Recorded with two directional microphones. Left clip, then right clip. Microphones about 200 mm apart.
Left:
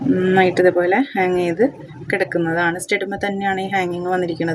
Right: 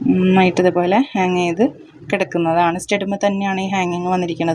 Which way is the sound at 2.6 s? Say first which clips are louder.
Right 2 dB; 25° right (ahead or behind).